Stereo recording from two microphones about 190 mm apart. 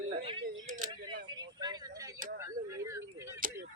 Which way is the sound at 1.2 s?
20° right (ahead or behind).